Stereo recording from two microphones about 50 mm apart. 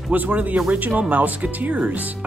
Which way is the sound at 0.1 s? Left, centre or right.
Right.